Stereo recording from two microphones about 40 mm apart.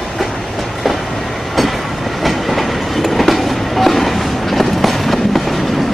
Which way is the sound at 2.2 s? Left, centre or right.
Centre.